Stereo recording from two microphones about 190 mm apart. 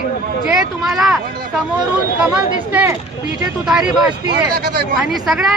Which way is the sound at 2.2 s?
5° right (ahead or behind).